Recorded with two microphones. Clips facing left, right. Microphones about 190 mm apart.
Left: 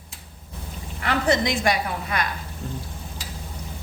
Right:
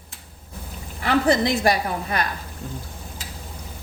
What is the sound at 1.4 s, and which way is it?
Speech, 35° right (ahead or behind).